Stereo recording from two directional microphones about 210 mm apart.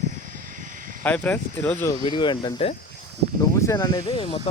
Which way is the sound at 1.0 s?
5° left (ahead or behind).